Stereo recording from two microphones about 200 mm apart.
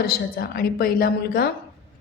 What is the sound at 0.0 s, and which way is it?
A woman's voice, 50° left (ahead or behind).